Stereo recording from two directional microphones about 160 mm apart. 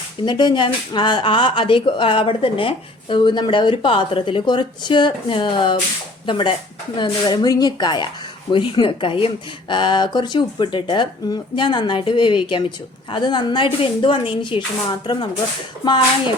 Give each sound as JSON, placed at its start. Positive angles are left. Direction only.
{"t": 0.3, "sound": "speech", "side_deg": 25}